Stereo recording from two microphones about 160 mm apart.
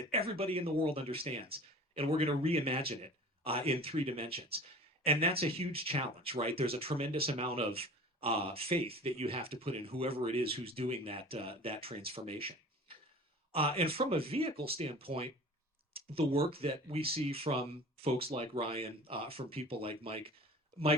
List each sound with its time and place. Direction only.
0.1 s speech: 35° right (ahead or behind)